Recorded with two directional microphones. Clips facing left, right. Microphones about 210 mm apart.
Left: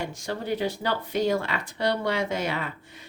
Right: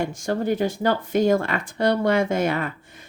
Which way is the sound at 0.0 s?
50° right (ahead or behind).